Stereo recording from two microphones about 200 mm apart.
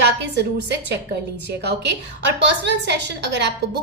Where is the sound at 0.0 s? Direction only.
60° right (ahead or behind).